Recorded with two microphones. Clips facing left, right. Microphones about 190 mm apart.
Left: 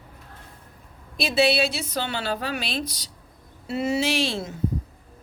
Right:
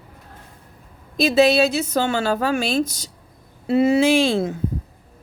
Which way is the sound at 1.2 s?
40° right (ahead or behind).